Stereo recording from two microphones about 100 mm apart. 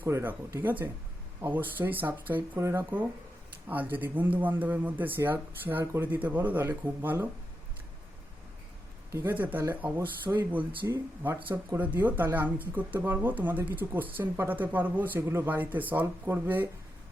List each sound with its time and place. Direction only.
0.0 s speech: 20° right (ahead or behind)
9.1 s speech: 20° right (ahead or behind)
10.6 s speech: 55° right (ahead or behind)
10.8 s speech: 20° right (ahead or behind)